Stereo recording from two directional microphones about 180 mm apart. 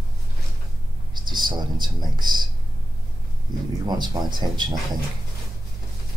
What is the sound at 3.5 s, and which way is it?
Speech, 25° right (ahead or behind).